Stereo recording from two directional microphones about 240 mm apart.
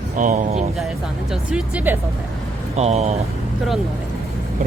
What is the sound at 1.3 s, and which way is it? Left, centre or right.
Speech, centre.